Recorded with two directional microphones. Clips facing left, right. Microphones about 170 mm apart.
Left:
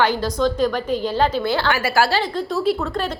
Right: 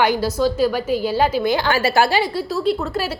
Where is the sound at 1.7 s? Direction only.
25° right (ahead or behind); by 3.1 s centre (ahead or behind).